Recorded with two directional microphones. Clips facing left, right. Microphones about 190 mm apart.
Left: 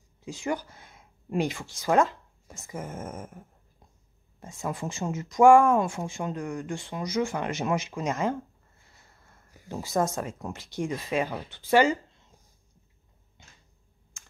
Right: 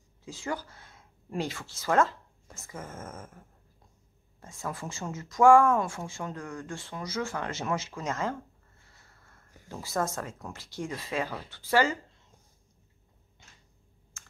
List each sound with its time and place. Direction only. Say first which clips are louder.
0.2 s speech: left 4 dB; 15° left (ahead or behind)
14.2 s computer keyboard: right 1 dB; 15° left (ahead or behind)